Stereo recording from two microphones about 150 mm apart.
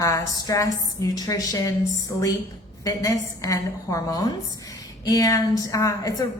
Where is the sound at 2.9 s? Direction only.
20° left (ahead or behind).